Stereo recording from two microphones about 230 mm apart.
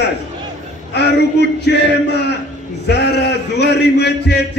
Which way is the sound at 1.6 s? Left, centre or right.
Left.